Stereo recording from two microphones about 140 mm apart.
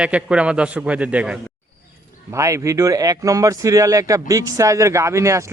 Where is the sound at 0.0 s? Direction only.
5° right (ahead or behind).